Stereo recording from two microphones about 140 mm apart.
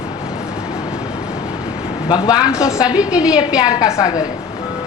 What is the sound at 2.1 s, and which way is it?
Speech, 30° left (ahead or behind).